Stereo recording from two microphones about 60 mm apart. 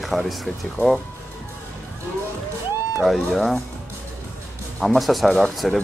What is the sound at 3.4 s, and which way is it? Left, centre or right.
Speech, centre.